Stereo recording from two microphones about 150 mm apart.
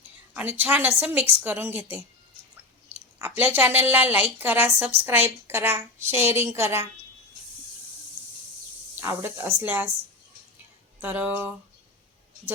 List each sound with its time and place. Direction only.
0.3 s a woman's voice: 10° right (ahead or behind)
3.2 s a woman's voice: 15° right (ahead or behind)
9.0 s a woman's voice: 15° right (ahead or behind)
11.0 s a woman's voice: 10° right (ahead or behind)